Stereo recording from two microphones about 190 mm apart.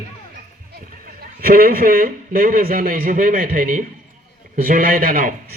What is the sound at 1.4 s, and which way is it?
A man's voice, 50° right (ahead or behind).